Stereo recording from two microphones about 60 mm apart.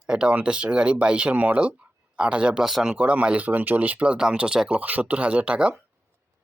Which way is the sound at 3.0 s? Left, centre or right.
Right.